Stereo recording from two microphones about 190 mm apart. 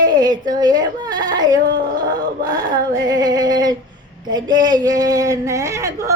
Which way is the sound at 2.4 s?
20° right (ahead or behind).